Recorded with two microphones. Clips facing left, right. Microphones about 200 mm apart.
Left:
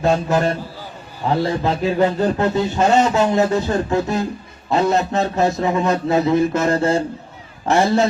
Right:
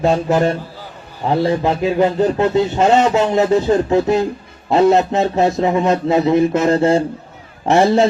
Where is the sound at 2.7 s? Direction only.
25° right (ahead or behind).